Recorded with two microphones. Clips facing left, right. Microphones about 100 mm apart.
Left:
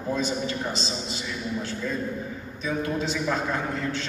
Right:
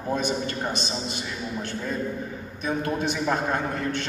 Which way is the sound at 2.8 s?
55° right (ahead or behind).